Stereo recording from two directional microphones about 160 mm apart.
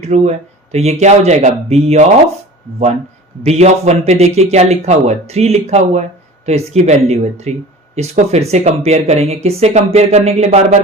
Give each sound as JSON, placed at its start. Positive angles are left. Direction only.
{"t": 0.0, "sound": "speech", "side_deg": -45}
{"t": 3.4, "sound": "speech", "side_deg": -40}